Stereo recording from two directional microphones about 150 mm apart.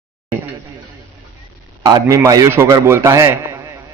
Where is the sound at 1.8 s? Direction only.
25° right (ahead or behind).